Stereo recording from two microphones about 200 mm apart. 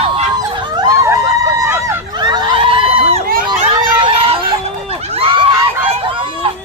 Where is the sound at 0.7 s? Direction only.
20° right (ahead or behind).